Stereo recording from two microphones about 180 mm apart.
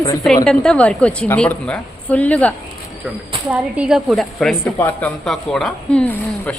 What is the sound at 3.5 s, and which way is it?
A woman's voice, 5° right (ahead or behind).